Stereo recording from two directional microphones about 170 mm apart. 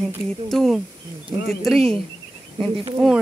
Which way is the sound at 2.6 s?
30° right (ahead or behind).